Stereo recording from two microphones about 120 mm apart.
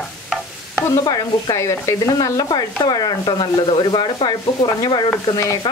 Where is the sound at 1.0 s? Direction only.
30° left (ahead or behind).